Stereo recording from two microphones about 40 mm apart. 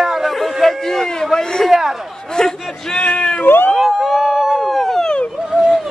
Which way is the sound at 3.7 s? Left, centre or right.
Centre.